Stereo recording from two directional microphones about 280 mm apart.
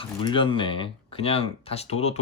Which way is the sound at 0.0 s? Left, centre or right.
Centre.